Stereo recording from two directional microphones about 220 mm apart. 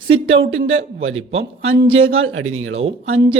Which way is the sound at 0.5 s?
65° right (ahead or behind).